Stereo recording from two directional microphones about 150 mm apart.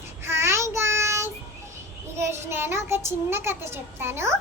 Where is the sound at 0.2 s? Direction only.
15° right (ahead or behind).